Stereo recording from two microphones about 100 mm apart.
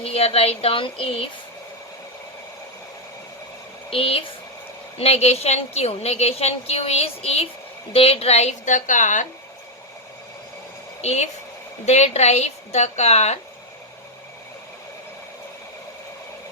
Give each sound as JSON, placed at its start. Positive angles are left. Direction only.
{"t": 0.0, "sound": "a woman's voice", "side_deg": 85}
{"t": 3.8, "sound": "a woman's voice", "side_deg": 70}
{"t": 4.9, "sound": "a woman's voice", "side_deg": 90}
{"t": 7.9, "sound": "a woman's voice", "side_deg": 80}
{"t": 11.0, "sound": "a woman's voice", "side_deg": 90}